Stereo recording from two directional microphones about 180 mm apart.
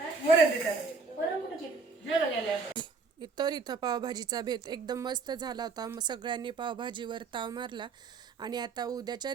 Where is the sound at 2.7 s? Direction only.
25° right (ahead or behind).